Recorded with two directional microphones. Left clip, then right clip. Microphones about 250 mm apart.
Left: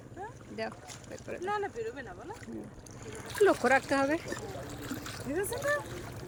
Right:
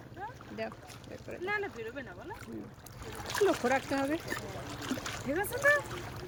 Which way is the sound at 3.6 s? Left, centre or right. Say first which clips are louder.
Left 4 dB; centre.